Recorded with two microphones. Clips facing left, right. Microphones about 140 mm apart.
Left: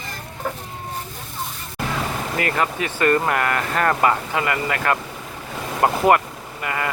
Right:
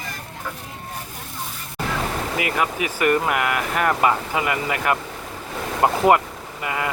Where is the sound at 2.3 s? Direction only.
10° right (ahead or behind).